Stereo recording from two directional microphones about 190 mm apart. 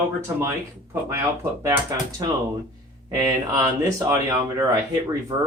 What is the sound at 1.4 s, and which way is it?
Speech, 15° right (ahead or behind).